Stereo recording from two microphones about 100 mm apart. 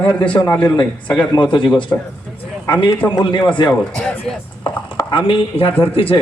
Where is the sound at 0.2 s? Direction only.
55° left (ahead or behind).